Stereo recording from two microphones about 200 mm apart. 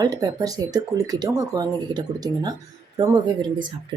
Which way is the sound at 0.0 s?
20° right (ahead or behind).